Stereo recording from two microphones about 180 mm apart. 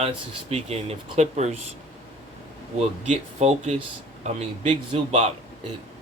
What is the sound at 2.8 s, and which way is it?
Speech, 40° right (ahead or behind).